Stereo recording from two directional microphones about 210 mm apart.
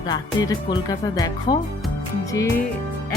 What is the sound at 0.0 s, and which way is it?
Speech, 20° left (ahead or behind).